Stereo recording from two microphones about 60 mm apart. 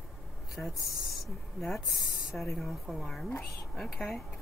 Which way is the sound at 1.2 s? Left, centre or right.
Centre.